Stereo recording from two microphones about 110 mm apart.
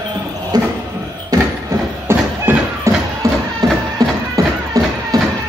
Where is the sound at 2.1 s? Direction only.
25° right (ahead or behind).